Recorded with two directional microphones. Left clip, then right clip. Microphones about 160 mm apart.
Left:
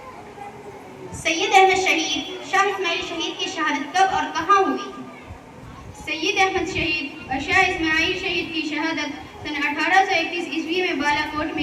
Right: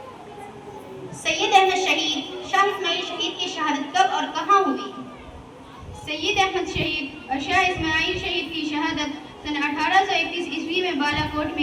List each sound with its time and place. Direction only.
1.2 s a woman's voice: 25° left (ahead or behind)
6.1 s a woman's voice: 20° left (ahead or behind)